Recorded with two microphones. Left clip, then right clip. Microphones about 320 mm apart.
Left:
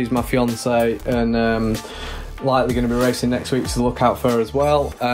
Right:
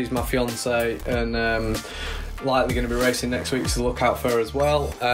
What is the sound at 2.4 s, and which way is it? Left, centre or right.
Speech, left.